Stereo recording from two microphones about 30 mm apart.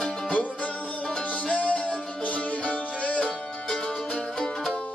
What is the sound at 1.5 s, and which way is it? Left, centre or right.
Music, left.